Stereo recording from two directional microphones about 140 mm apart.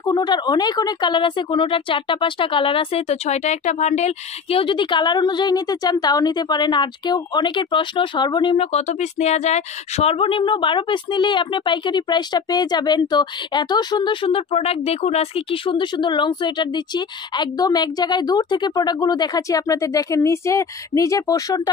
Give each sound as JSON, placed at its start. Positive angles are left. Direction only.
{"t": 0.0, "sound": "a woman's voice", "side_deg": 30}
{"t": 8.7, "sound": "a woman's voice", "side_deg": 50}